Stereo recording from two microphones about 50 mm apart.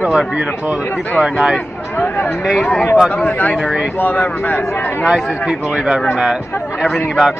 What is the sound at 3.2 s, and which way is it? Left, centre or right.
Speech, left.